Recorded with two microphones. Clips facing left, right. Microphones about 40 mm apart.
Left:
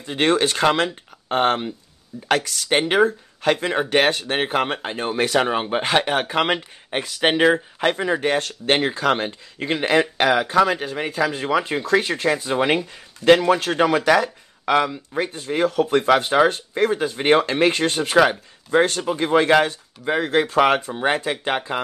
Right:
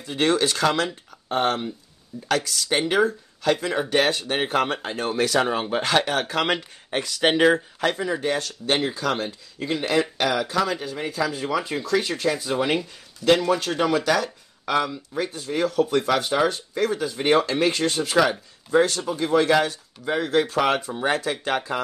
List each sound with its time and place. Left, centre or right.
0.0 s speech: left
8.0 s speech: left